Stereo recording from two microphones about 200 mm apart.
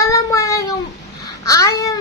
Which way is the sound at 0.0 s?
15° left (ahead or behind).